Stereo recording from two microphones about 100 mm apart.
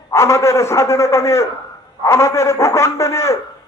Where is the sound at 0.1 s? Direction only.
30° left (ahead or behind).